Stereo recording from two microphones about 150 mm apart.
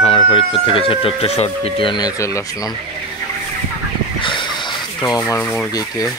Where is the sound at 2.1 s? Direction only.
20° left (ahead or behind).